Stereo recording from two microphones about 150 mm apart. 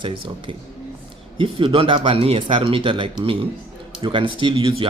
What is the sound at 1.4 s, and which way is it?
Speech, 35° right (ahead or behind).